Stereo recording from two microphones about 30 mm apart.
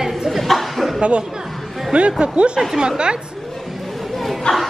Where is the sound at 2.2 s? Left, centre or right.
Right.